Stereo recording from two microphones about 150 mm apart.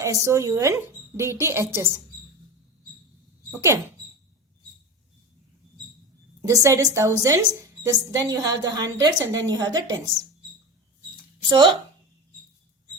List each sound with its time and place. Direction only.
0.0 s a woman's voice: 20° right (ahead or behind)
3.5 s a woman's voice: 20° right (ahead or behind)
6.4 s a woman's voice: 20° right (ahead or behind)
11.4 s a woman's voice: 30° right (ahead or behind)